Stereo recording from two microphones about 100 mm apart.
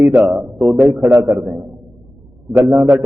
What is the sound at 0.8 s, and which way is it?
Speech, 20° right (ahead or behind).